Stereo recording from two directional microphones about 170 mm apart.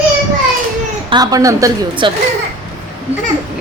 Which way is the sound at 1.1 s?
25° right (ahead or behind).